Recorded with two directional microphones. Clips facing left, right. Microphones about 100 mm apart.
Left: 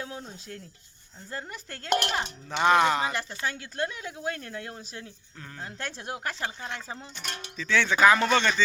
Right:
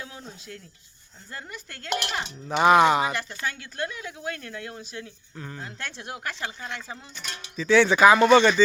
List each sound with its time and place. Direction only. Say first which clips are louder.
0.0 s a sound: left 3 dB; 35° left (ahead or behind)
1.3 s speech: left 2 dB; 30° left (ahead or behind)
2.5 s speech: right 4 dB; 15° right (ahead or behind)
3.1 s speech: right 1 dB; 30° left (ahead or behind)
5.4 s speech: right 4 dB; 10° right (ahead or behind)
5.6 s speech: left 1 dB; 35° left (ahead or behind)
7.5 s speech: right 7 dB; 15° right (ahead or behind)